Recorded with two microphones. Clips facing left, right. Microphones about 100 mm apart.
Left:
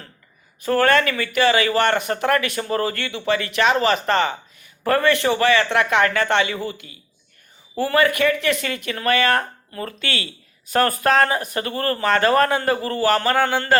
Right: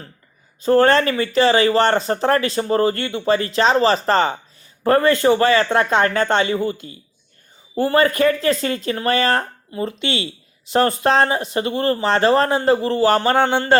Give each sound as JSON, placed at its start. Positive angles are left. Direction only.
{"t": 0.6, "sound": "speech", "side_deg": -25}